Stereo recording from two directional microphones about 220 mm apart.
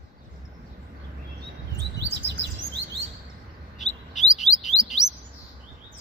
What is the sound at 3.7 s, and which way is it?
Bird, 30° left (ahead or behind).